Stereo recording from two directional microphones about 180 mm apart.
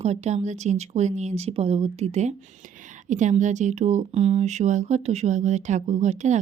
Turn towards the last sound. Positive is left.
turn(degrees=-40)  # may be behind; listen again after turning